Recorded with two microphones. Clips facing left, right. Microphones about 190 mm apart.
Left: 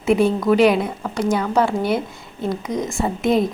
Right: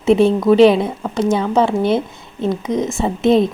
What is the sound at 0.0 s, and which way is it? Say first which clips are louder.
A woman's voice: right 4 dB; 25° right (ahead or behind).